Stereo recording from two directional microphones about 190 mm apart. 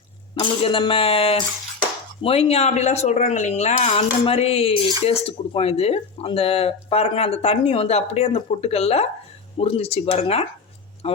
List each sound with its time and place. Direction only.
0.3 s speech: 25° left (ahead or behind)